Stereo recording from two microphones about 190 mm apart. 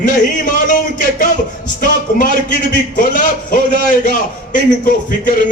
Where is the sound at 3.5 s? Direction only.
45° left (ahead or behind).